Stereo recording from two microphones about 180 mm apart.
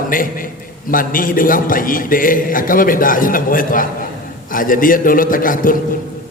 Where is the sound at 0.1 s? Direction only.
50° left (ahead or behind).